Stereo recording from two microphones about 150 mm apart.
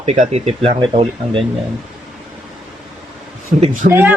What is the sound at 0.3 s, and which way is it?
Speech, 45° right (ahead or behind).